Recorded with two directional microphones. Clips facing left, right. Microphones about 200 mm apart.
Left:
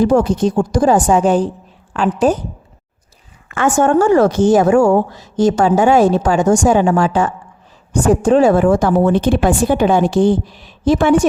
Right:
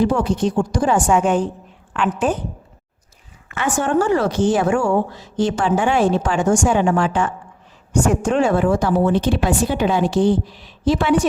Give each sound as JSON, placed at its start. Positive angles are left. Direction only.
{"t": 0.0, "sound": "a woman's voice", "side_deg": 40}
{"t": 3.5, "sound": "a woman's voice", "side_deg": 50}